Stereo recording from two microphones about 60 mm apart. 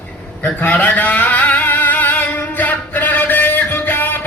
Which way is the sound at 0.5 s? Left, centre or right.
Left.